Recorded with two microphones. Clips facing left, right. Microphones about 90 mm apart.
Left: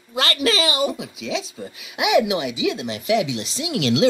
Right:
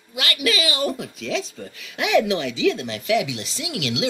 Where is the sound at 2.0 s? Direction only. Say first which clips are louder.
Left 1 dB; 15° left (ahead or behind); by 4.0 s 30° left (ahead or behind).